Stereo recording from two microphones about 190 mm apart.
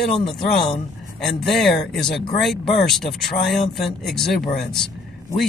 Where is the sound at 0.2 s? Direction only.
30° left (ahead or behind).